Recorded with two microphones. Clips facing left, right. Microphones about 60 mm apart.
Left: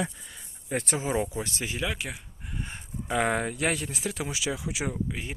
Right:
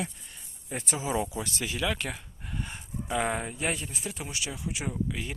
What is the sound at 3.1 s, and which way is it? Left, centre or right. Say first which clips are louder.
Speech: left 3 dB; left.